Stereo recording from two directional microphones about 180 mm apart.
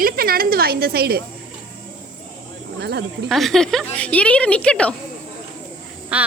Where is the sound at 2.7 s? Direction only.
70° right (ahead or behind).